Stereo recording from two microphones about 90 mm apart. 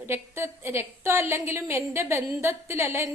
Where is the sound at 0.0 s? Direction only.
25° right (ahead or behind).